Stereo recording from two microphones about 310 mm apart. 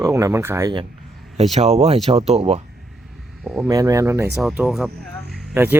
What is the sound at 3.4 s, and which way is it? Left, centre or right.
Speech, centre.